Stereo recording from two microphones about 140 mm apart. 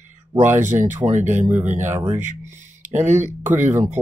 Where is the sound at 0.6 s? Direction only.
60° right (ahead or behind).